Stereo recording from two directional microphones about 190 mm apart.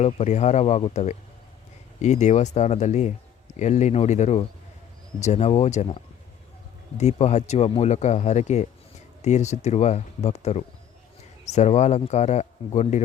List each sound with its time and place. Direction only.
0.0 s speech: 35° left (ahead or behind)